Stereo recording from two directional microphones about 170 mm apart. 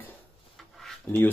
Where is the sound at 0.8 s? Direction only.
5° left (ahead or behind).